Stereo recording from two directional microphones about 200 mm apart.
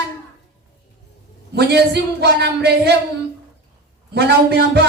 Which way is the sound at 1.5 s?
55° right (ahead or behind).